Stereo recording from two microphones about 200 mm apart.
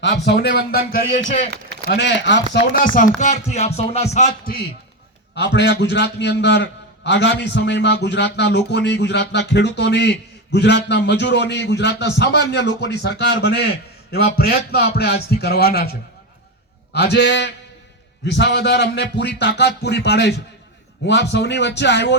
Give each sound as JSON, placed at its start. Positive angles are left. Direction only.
{"t": 0.0, "sound": "a man's voice", "side_deg": 60}
{"t": 0.9, "sound": "speech", "side_deg": 45}
{"t": 1.9, "sound": "a man's voice", "side_deg": 60}
{"t": 2.8, "sound": "speech", "side_deg": 45}
{"t": 5.3, "sound": "a man's voice", "side_deg": 60}